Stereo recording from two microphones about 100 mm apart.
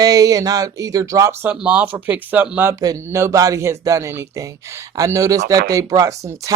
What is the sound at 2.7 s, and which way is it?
Speech, 35° right (ahead or behind).